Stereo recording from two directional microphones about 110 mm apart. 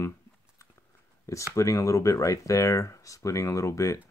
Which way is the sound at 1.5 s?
25° left (ahead or behind).